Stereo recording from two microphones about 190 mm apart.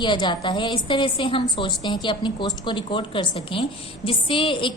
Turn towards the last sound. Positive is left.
turn(degrees=25)  # may be behind; listen again after turning